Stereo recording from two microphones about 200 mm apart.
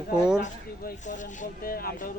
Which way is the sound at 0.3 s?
45° left (ahead or behind).